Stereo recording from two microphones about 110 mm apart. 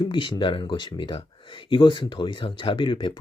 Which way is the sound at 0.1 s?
45° left (ahead or behind).